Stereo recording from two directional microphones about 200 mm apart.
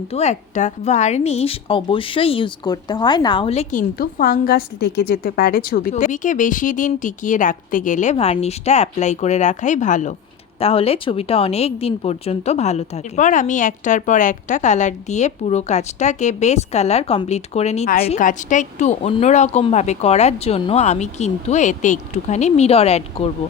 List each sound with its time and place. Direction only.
0.1 s speech: 35° left (ahead or behind)